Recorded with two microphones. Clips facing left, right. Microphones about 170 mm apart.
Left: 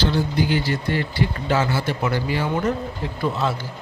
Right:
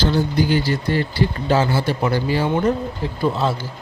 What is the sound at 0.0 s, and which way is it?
Speech, 40° right (ahead or behind).